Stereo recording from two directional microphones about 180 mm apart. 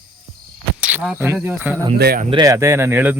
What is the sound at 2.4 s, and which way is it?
Speech, 15° right (ahead or behind).